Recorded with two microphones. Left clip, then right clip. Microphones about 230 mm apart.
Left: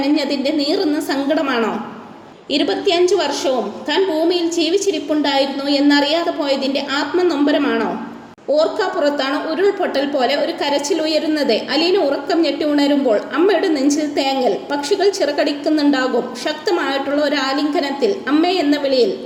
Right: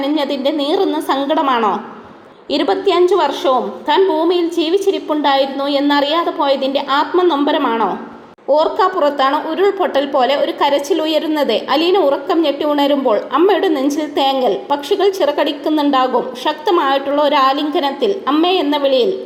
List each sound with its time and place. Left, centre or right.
0.2 s a woman's voice: centre
2.9 s a woman's voice: centre